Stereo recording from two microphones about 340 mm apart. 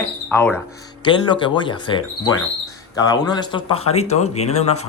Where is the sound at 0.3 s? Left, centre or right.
Centre.